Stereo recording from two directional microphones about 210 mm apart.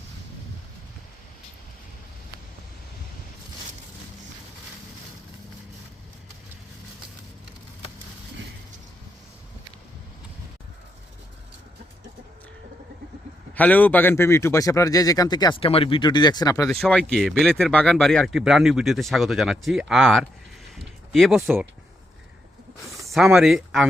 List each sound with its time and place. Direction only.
13.6 s speech: 10° left (ahead or behind)
16.6 s speech: centre (ahead or behind)
20.7 s a sound: centre (ahead or behind)
23.0 s speech: centre (ahead or behind)